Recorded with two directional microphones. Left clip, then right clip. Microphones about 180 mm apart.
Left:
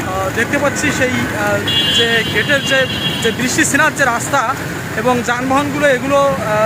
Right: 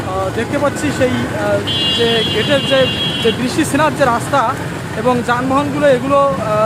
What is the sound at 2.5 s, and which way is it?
Speech, 15° right (ahead or behind).